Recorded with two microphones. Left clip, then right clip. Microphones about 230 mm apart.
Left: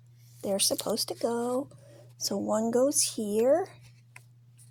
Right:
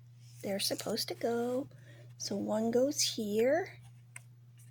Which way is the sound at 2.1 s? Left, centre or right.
Centre.